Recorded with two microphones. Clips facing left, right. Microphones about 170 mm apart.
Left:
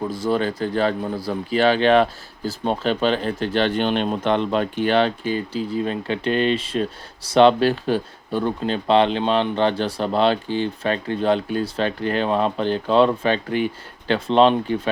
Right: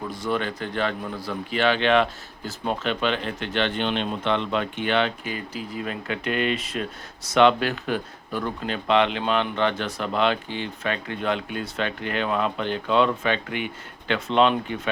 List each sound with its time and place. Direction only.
0.3 s speech: 35° left (ahead or behind)